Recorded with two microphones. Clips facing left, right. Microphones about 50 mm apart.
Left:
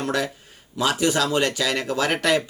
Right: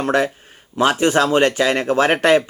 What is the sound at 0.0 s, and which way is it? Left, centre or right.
Speech, right.